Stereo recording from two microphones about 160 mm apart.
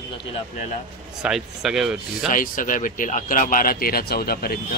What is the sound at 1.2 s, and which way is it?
Speech, 5° right (ahead or behind).